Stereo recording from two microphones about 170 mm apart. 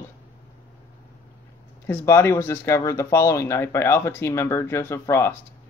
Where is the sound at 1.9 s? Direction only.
15° left (ahead or behind).